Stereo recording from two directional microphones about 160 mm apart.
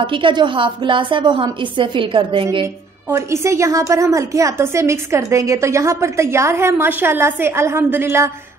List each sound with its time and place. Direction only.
0.0 s a woman's voice: 30° right (ahead or behind)
2.6 s a woman's voice: 20° right (ahead or behind)